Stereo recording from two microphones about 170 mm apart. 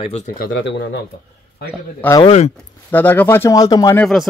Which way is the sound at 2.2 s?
40° left (ahead or behind).